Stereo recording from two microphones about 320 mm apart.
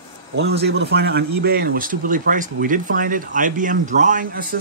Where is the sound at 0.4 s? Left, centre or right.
Right.